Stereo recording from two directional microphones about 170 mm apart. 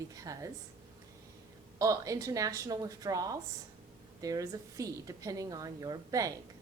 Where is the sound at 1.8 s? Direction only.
20° right (ahead or behind).